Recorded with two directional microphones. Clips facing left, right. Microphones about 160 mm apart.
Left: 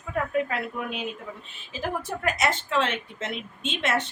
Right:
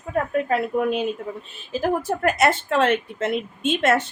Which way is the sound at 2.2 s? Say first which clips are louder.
Right 6 dB; 55° right (ahead or behind).